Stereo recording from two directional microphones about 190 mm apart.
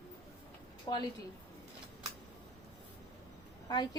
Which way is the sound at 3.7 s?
20° left (ahead or behind).